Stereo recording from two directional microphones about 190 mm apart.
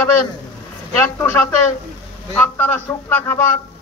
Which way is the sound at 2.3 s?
10° left (ahead or behind).